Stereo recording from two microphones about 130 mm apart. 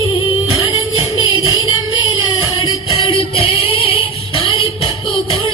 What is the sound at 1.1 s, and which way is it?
Music, 40° left (ahead or behind).